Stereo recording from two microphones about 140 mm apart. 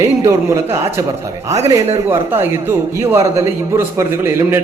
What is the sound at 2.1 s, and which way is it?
A man's voice, 15° right (ahead or behind).